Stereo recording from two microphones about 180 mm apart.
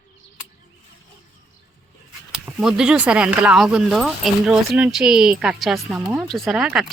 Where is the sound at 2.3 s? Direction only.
5° right (ahead or behind).